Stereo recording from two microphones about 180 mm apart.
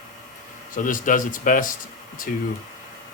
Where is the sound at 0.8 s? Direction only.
45° left (ahead or behind).